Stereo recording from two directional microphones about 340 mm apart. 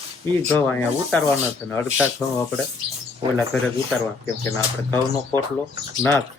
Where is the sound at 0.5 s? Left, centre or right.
Centre.